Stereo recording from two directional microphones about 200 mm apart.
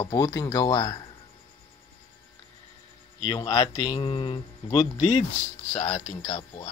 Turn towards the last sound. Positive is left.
turn(degrees=25)  # may be behind; listen again after turning